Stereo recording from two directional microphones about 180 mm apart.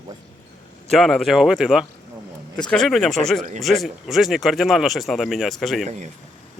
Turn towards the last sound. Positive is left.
turn(degrees=-40)  # may be behind; listen again after turning